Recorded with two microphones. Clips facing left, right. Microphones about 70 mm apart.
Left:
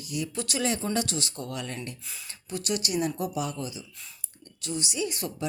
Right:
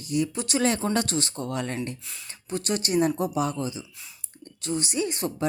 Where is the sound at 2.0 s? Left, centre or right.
Centre.